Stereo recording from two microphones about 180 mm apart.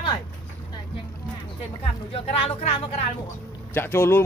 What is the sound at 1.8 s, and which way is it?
Speech, 30° left (ahead or behind).